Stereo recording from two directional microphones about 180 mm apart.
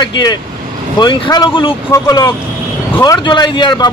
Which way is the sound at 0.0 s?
25° left (ahead or behind).